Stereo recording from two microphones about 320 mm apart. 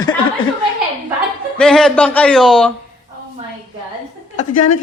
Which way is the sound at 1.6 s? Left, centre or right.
Centre.